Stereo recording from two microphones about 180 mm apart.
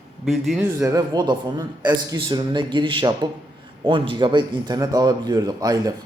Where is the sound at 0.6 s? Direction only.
15° right (ahead or behind).